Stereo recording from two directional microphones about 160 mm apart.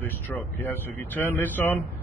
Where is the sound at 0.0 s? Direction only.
10° left (ahead or behind).